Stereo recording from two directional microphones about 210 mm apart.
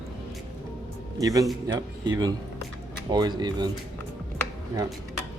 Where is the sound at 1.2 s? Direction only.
15° right (ahead or behind).